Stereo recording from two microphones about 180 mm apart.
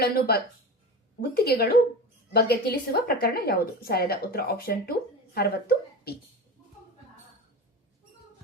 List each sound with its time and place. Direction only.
0.0 s a woman's voice: 60° left (ahead or behind)